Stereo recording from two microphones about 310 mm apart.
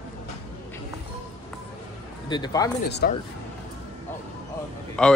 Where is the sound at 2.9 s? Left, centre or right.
Left.